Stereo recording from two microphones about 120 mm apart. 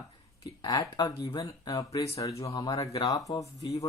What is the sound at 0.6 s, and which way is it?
Speech, 35° left (ahead or behind).